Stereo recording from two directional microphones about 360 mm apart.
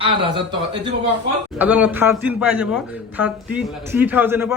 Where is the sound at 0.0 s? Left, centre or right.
Centre.